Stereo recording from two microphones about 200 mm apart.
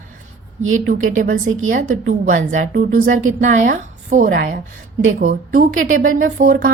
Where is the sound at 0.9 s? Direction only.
40° right (ahead or behind).